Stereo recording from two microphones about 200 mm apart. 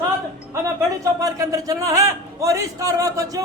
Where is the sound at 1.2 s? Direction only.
15° right (ahead or behind).